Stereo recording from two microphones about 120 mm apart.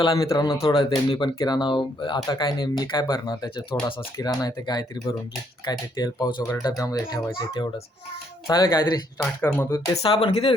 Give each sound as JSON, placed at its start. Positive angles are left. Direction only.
{"t": 0.0, "sound": "speech", "side_deg": 30}
{"t": 0.6, "sound": "speech", "side_deg": 45}
{"t": 9.6, "sound": "speech", "side_deg": 20}
{"t": 10.0, "sound": "speech", "side_deg": 50}